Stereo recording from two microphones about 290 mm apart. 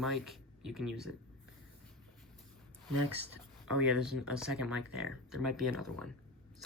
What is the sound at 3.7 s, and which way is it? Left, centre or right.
Speech, centre.